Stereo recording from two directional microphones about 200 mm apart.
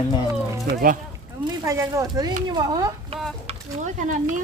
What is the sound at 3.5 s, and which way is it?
Speech, 35° right (ahead or behind).